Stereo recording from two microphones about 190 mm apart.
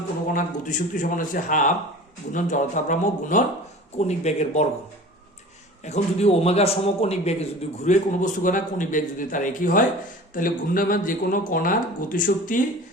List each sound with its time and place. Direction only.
0.3 s a man's voice: 45° left (ahead or behind)
5.8 s a man's voice: 35° left (ahead or behind)